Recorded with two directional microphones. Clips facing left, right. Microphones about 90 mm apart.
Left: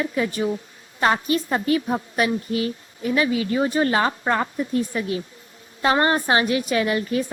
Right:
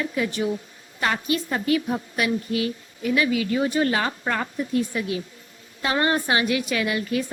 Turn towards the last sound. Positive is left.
turn(degrees=35)  # may be behind; listen again after turning